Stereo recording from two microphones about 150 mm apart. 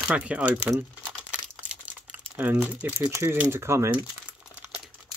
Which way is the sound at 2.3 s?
10° right (ahead or behind).